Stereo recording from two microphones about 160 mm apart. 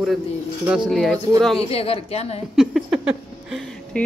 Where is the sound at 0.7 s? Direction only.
Centre (ahead or behind).